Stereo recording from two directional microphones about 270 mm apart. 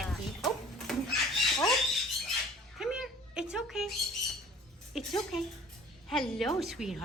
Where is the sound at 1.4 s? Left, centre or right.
Centre.